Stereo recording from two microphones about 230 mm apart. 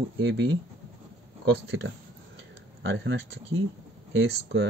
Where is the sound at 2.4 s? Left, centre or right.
Right.